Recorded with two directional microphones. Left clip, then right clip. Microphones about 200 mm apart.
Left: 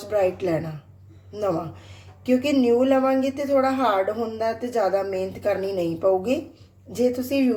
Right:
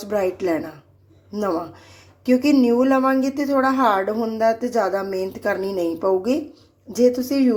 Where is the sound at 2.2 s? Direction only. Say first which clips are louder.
Right 3 dB; 30° right (ahead or behind).